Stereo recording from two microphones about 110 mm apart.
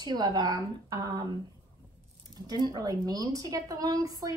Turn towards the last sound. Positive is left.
turn(degrees=-35)  # may be behind; listen again after turning